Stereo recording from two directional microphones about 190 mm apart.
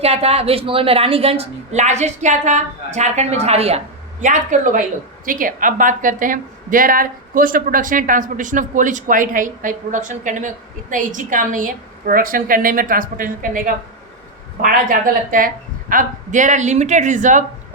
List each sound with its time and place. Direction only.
0.0 s a woman's voice: 35° right (ahead or behind)
14.6 s a woman's voice: 45° right (ahead or behind)